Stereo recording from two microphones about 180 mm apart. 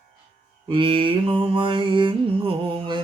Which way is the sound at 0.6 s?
30° right (ahead or behind).